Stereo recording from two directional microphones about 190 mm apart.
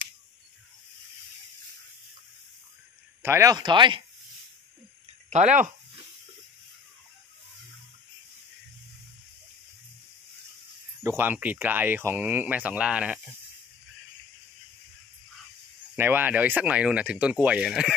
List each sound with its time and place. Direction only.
3.2 s speech: 15° right (ahead or behind)
5.3 s speech: 40° right (ahead or behind)
11.0 s speech: 15° right (ahead or behind)
16.0 s speech: 10° right (ahead or behind)